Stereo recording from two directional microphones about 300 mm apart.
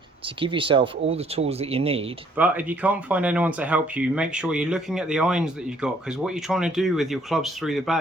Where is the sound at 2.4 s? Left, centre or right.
Centre.